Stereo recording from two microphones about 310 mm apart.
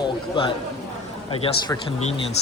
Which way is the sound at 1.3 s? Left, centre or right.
Centre.